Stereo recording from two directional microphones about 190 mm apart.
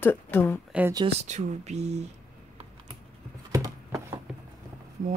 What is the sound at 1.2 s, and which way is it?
Speech, 40° right (ahead or behind).